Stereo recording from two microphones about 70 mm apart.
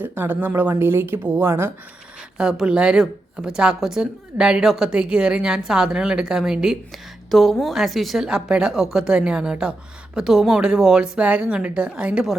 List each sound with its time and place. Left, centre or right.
0.0 s speech: right
2.4 s a woman's voice: centre
7.3 s a woman's voice: centre